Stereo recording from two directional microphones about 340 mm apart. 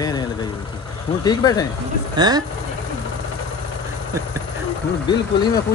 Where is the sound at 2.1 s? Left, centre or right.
Centre.